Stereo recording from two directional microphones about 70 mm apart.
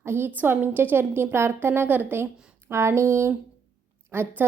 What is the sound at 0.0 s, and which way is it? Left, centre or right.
A woman's voice, right.